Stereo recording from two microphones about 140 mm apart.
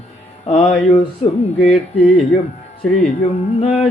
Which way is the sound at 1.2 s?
50° left (ahead or behind).